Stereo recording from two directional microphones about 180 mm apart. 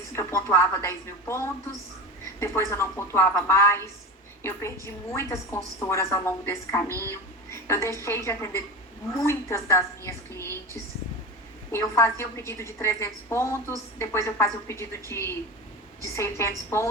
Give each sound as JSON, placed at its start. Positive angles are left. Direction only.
{"t": 0.1, "sound": "a woman's voice", "side_deg": 15}
{"t": 5.1, "sound": "a woman's voice", "side_deg": 15}
{"t": 11.7, "sound": "a woman's voice", "side_deg": 15}